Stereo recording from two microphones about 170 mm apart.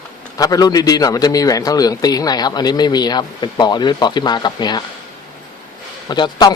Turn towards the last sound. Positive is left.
turn(degrees=25)  # may be behind; listen again after turning